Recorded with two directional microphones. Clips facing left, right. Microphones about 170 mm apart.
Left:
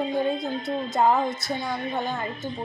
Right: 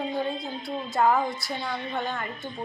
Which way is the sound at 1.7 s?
45° left (ahead or behind).